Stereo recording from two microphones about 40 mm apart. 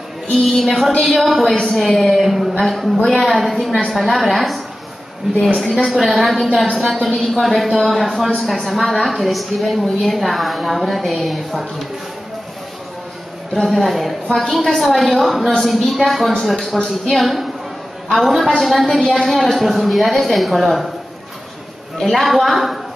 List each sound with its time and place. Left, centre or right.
0.3 s a woman's voice: centre
1.5 s a woman's voice: centre
5.9 s a woman's voice: centre
13.7 s a woman's voice: centre
16.7 s a woman's voice: centre
17.1 s a woman's voice: centre
22.0 s a woman's voice: centre